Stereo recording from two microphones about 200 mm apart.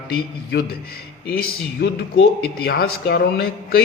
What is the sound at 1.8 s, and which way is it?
A man's voice, 55° left (ahead or behind).